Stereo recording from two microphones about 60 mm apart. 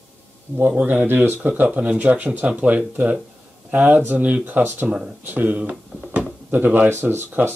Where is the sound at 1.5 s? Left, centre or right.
Right.